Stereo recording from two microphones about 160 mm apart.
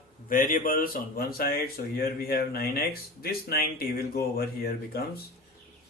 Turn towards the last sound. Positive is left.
turn(degrees=70)  # may be behind; listen again after turning